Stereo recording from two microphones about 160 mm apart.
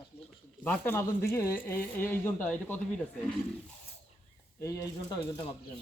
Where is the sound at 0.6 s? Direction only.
10° left (ahead or behind).